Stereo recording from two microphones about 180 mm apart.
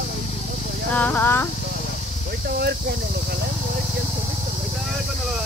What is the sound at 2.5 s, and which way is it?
Speech, 60° right (ahead or behind).